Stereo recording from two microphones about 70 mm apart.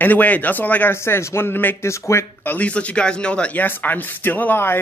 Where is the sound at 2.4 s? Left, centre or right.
Left.